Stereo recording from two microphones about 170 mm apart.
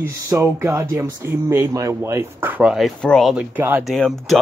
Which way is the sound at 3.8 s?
Centre (ahead or behind).